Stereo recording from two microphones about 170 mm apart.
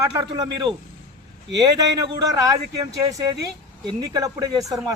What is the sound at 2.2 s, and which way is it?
A man's voice, 20° right (ahead or behind).